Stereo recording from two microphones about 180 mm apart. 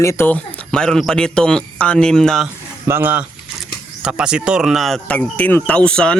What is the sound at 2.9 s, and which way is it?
Speech, 10° right (ahead or behind).